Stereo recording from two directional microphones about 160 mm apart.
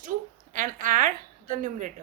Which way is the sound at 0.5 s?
55° right (ahead or behind).